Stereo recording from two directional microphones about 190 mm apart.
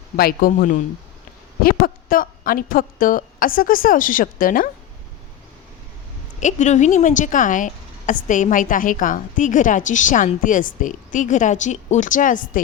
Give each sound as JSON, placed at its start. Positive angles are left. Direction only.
{"t": 0.2, "sound": "a woman's voice", "side_deg": 50}
{"t": 6.4, "sound": "a woman's voice", "side_deg": 40}